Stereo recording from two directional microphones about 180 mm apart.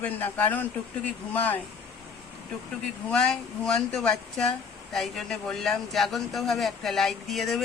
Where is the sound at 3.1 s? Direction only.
5° left (ahead or behind).